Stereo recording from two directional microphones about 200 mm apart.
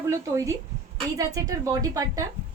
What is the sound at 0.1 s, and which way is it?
Speech, 15° right (ahead or behind).